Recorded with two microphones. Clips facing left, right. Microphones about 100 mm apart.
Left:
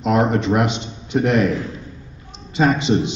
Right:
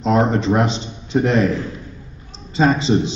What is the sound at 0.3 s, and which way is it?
A man's voice, 30° right (ahead or behind).